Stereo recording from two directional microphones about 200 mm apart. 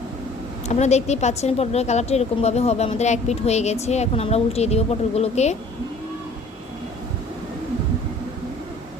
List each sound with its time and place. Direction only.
0.7 s a woman's voice: 35° left (ahead or behind)